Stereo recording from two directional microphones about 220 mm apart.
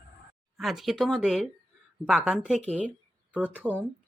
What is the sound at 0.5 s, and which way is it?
Speech, centre (ahead or behind).